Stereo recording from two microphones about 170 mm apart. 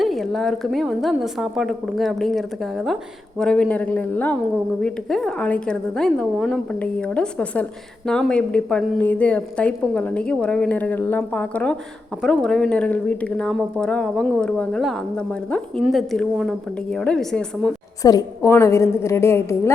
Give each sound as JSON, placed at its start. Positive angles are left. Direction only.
{"t": 0.0, "sound": "a woman's voice", "side_deg": 0}
{"t": 18.0, "sound": "a woman's voice", "side_deg": 20}